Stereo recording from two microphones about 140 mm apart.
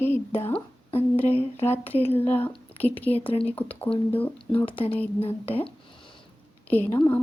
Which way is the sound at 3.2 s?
40° left (ahead or behind).